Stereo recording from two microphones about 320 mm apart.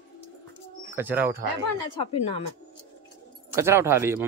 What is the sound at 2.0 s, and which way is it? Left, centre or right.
Speech, centre.